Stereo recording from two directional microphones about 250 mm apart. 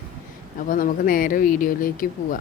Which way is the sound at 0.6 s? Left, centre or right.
Left.